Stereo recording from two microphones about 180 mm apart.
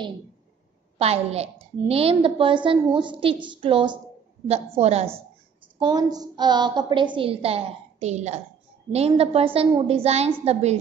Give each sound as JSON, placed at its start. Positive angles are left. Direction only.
{"t": 0.9, "sound": "a woman's voice", "side_deg": -35}
{"t": 5.8, "sound": "a woman's voice", "side_deg": -25}